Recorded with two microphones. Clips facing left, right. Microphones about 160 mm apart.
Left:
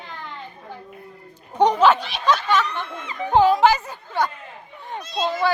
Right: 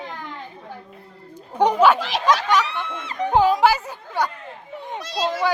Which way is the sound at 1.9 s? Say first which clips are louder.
Right 6 dB; 90° right.